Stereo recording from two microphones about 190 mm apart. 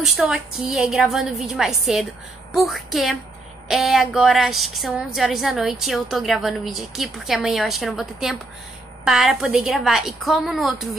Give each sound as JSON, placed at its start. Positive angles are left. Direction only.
{"t": 0.0, "sound": "a woman's voice", "side_deg": 0}